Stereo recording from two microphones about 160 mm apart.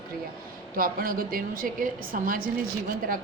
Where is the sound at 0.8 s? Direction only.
65° right (ahead or behind).